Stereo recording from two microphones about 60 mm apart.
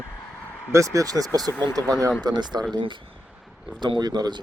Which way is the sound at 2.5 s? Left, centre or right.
Right.